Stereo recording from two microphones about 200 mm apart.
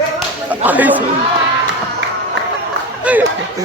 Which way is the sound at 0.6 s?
10° right (ahead or behind).